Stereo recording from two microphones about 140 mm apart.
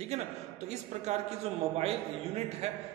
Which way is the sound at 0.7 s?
50° right (ahead or behind).